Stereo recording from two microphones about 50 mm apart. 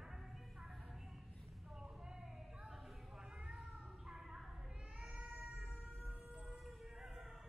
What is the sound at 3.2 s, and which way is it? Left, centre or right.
Cat, centre.